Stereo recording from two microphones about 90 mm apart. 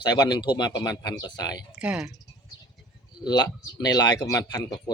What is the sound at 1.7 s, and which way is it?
Speech, 10° right (ahead or behind).